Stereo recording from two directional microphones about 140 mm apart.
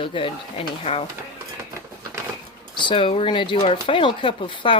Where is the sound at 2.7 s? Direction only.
35° left (ahead or behind).